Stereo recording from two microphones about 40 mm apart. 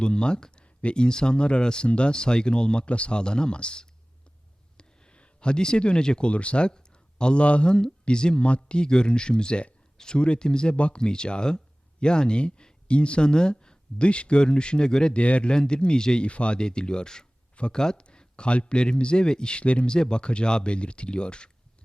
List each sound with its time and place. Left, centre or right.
0.0 s speech: left
6.7 s speech: left